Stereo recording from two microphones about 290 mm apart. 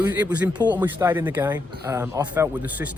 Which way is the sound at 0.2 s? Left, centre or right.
Centre.